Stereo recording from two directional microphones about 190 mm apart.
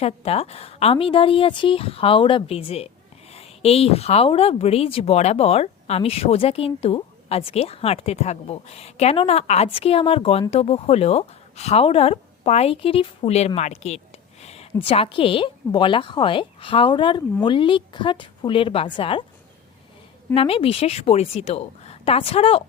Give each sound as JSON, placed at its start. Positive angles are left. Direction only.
{"t": 0.0, "sound": "a woman's voice", "side_deg": 30}
{"t": 20.3, "sound": "speech", "side_deg": 30}